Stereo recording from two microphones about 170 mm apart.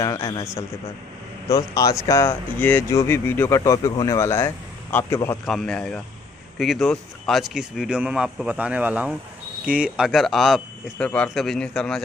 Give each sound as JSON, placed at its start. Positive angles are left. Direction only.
{"t": 0.0, "sound": "a man's voice", "side_deg": 20}
{"t": 1.5, "sound": "speech", "side_deg": 20}
{"t": 5.5, "sound": "a man's voice", "side_deg": 5}